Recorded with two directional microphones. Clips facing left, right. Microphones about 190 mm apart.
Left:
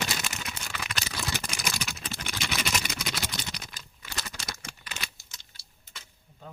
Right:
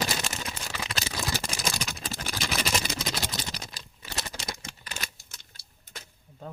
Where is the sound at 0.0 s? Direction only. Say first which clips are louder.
Right 3 dB; 35° right (ahead or behind).